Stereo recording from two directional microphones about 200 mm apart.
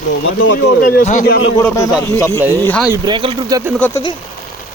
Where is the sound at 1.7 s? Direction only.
15° left (ahead or behind).